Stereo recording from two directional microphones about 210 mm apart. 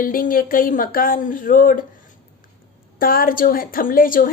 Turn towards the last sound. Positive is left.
turn(degrees=40)  # may be behind; listen again after turning